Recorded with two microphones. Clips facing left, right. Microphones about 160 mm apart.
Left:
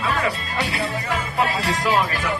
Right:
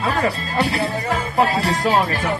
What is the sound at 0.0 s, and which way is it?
Speech, 35° right (ahead or behind).